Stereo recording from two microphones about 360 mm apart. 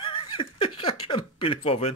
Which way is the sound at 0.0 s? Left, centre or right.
Centre.